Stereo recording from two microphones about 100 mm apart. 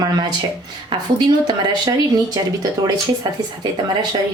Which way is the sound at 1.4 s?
40° right (ahead or behind).